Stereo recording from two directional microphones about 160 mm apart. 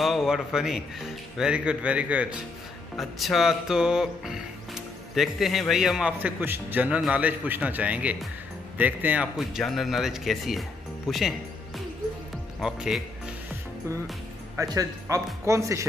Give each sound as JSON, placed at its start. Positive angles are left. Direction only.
{"t": 0.0, "sound": "music", "side_deg": 0}
{"t": 12.5, "sound": "music", "side_deg": -5}
{"t": 14.6, "sound": "speech", "side_deg": -20}